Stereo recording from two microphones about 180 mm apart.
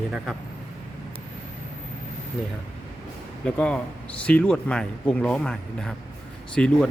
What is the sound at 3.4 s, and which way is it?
Speech, 5° left (ahead or behind).